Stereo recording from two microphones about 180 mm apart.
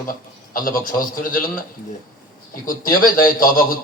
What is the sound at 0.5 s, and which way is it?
Speech, 50° left (ahead or behind).